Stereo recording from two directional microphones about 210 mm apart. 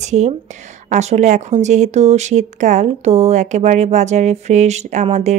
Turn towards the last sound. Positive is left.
turn(degrees=-35)  # may be behind; listen again after turning